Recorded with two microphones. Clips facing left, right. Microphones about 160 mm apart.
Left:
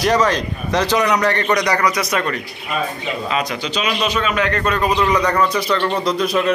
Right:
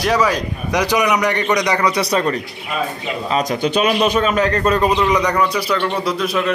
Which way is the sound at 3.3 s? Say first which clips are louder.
Right 7 dB; 45° right (ahead or behind).